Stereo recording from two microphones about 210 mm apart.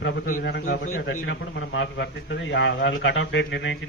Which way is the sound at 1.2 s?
60° left (ahead or behind).